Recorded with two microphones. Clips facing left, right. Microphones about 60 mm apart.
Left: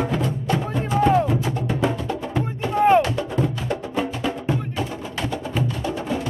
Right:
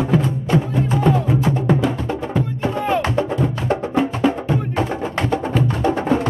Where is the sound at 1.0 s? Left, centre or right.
Left.